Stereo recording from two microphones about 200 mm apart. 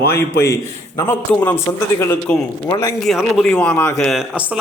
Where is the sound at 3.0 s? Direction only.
Centre (ahead or behind).